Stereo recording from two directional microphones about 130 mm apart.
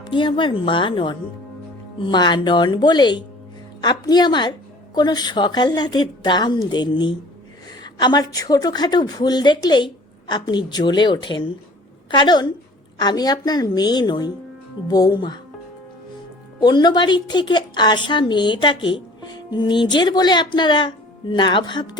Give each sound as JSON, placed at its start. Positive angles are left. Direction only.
{"t": 0.1, "sound": "a woman's voice", "side_deg": 40}
{"t": 16.6, "sound": "a woman's voice", "side_deg": 35}